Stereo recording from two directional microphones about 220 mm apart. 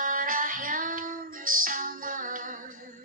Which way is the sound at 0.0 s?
35° right (ahead or behind).